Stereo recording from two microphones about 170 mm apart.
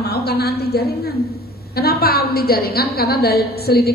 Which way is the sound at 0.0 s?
70° left (ahead or behind).